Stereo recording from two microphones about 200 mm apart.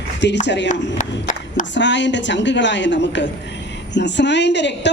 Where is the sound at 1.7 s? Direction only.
65° left (ahead or behind).